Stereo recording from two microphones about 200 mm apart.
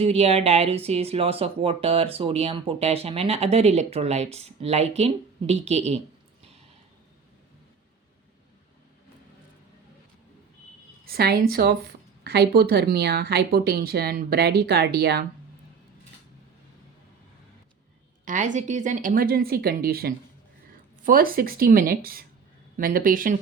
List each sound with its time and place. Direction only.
0.0 s speech: 30° right (ahead or behind)
11.0 s speech: 50° right (ahead or behind)
18.3 s speech: 40° right (ahead or behind)